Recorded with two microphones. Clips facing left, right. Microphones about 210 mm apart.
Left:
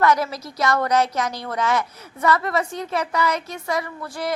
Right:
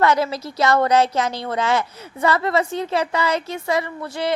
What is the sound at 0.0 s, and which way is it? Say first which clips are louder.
Speech: right 1 dB; 25° right (ahead or behind).